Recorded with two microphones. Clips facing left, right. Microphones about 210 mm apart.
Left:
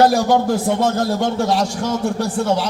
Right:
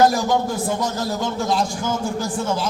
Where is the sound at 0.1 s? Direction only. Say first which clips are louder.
Left 5 dB; 60° left (ahead or behind).